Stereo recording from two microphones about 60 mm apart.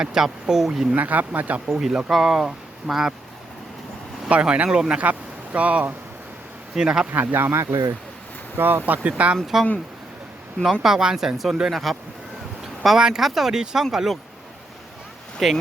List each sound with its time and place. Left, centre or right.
0.0 s speech: centre
0.9 s speech: right
1.6 s speech: centre
4.3 s speech: right
7.1 s speech: right
8.5 s speech: right
9.0 s speech: right
10.6 s speech: centre
12.6 s a sound: centre
13.0 s speech: centre
15.4 s speech: centre